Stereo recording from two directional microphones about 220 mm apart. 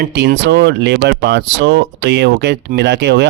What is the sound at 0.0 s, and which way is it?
Speech, 50° right (ahead or behind).